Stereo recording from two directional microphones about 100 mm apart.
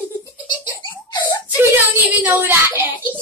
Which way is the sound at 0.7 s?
50° left (ahead or behind).